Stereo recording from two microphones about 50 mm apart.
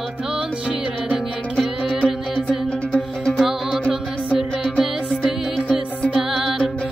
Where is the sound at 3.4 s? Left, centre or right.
Centre.